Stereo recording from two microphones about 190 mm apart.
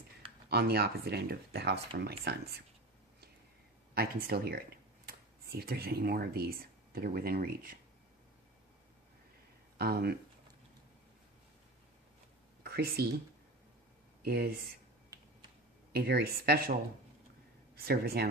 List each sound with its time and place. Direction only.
0.4 s speech: 60° right (ahead or behind)
3.9 s speech: 55° right (ahead or behind)
9.7 s speech: 55° right (ahead or behind)
12.6 s speech: 55° right (ahead or behind)
14.3 s speech: 55° right (ahead or behind)
15.9 s speech: 55° right (ahead or behind)
17.7 s speech: 55° right (ahead or behind)